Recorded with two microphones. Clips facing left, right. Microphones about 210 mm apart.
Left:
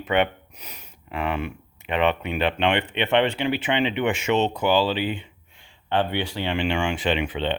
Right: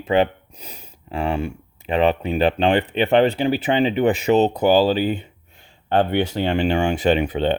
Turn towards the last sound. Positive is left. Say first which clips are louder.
# right 6 dB
turn(degrees=-40)  # may be behind; listen again after turning